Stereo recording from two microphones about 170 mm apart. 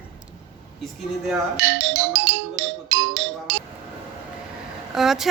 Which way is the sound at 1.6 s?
90° right.